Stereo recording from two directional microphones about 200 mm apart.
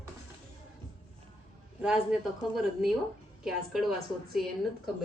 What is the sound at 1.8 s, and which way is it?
Speech, 5° right (ahead or behind).